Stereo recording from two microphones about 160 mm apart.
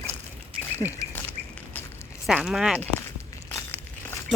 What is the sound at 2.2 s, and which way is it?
Speech, centre (ahead or behind).